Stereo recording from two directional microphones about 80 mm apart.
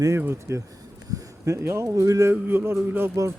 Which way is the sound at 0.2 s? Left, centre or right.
Right.